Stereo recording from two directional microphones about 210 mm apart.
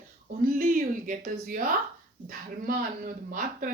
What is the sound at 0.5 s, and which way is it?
Speech, 40° right (ahead or behind).